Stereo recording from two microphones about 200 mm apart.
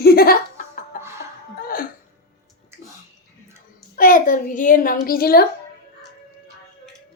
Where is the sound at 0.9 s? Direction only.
45° left (ahead or behind).